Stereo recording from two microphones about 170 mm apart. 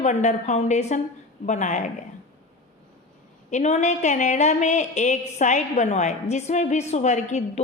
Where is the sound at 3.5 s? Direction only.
45° left (ahead or behind).